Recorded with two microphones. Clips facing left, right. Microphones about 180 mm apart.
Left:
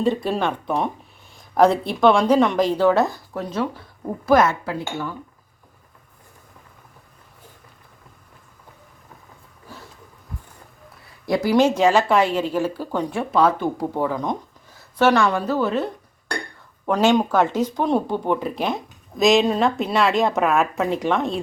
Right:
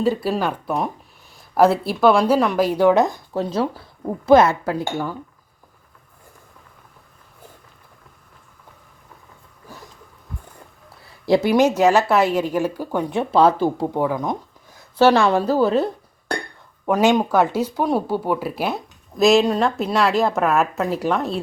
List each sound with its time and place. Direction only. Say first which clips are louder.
0.0 s speech: right 1 dB; 5° right (ahead or behind); by 4.5 s 25° right (ahead or behind)
4.6 s speech: right 4 dB; 40° right (ahead or behind)
11.3 s speech: right 4 dB; 25° right (ahead or behind)
11.8 s speech: right 1 dB; 10° right (ahead or behind)
13.3 s speech: right 3 dB; 30° right (ahead or behind)
13.9 s speech: right 2 dB; 10° right (ahead or behind)
14.9 s speech: right 3 dB; 30° right (ahead or behind)
16.8 s speech: right 1 dB; 10° right (ahead or behind)